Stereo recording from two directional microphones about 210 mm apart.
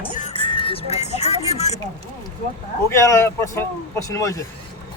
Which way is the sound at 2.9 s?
15° left (ahead or behind).